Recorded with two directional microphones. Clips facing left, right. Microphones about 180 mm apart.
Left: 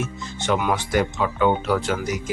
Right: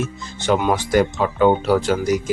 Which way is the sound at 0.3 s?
35° right (ahead or behind).